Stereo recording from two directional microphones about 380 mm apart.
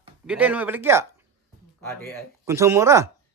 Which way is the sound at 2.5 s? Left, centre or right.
Centre.